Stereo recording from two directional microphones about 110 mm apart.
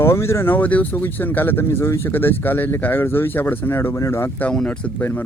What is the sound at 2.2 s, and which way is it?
Speech, 20° left (ahead or behind).